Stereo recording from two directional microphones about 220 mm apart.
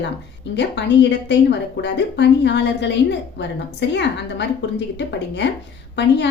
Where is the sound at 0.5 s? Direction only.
50° left (ahead or behind).